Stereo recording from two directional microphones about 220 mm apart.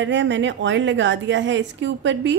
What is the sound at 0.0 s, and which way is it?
A woman's voice, 55° right (ahead or behind).